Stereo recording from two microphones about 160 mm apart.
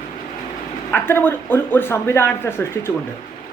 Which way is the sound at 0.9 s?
15° left (ahead or behind).